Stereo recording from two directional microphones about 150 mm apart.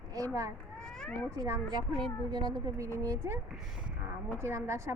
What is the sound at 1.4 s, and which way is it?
A woman's voice, 20° right (ahead or behind).